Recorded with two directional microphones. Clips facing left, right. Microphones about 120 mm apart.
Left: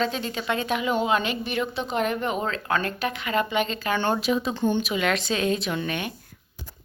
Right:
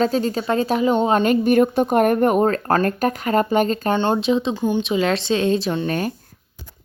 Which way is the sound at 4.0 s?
20° right (ahead or behind).